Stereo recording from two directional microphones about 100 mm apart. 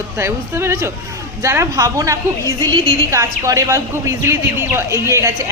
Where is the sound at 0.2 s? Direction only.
25° right (ahead or behind).